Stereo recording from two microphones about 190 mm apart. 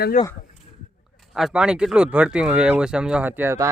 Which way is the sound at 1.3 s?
Centre (ahead or behind).